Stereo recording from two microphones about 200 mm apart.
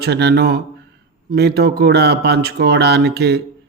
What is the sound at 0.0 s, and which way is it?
A man's voice, 55° right (ahead or behind).